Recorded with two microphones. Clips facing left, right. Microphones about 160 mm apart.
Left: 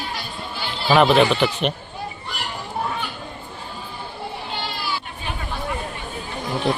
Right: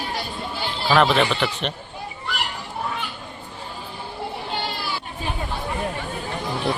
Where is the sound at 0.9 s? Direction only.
5° left (ahead or behind).